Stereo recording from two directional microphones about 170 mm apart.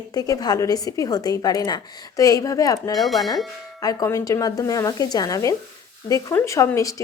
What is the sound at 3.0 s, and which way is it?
Speech, centre (ahead or behind).